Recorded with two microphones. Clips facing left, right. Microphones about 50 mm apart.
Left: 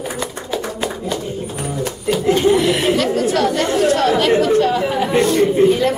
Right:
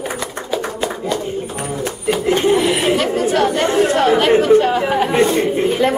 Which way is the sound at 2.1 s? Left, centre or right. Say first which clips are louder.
Left 1 dB; right.